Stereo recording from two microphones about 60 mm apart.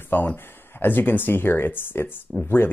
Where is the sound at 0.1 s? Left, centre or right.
Left.